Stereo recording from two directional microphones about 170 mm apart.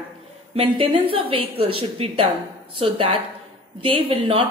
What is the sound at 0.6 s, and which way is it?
A woman's voice, 30° right (ahead or behind).